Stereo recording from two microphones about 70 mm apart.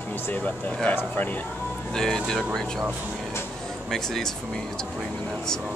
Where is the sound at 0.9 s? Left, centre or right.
Left.